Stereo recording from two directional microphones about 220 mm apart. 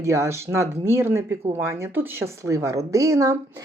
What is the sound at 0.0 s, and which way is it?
Speech, 15° right (ahead or behind).